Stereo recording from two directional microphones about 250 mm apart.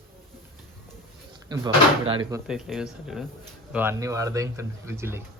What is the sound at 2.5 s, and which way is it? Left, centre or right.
A man's voice, centre.